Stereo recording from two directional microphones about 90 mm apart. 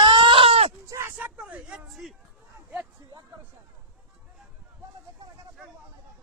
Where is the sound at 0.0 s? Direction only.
60° right (ahead or behind); by 0.6 s 90° right.